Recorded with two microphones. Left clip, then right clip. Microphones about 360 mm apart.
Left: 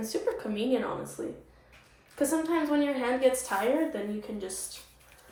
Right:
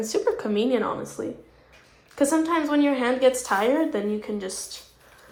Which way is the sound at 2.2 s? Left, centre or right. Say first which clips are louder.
Right 6 dB; centre.